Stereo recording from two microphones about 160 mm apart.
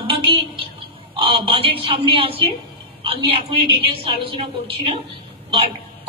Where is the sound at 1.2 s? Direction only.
35° right (ahead or behind).